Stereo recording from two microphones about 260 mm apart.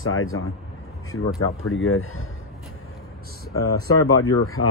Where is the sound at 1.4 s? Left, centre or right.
Left.